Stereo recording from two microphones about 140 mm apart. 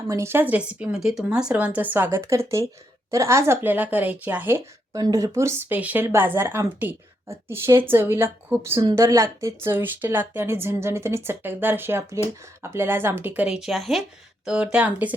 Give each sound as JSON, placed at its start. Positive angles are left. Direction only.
{"t": 0.1, "sound": "speech", "side_deg": -20}